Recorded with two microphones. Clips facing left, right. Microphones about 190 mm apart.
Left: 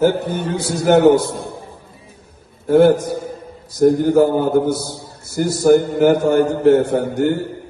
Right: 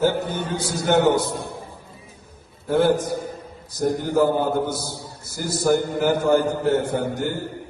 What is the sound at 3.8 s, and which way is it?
A man's voice, 60° left (ahead or behind).